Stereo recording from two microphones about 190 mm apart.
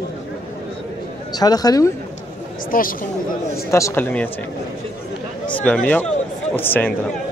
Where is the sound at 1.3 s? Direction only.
20° left (ahead or behind).